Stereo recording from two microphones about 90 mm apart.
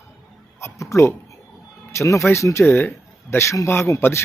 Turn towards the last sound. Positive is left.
turn(degrees=30)  # may be behind; listen again after turning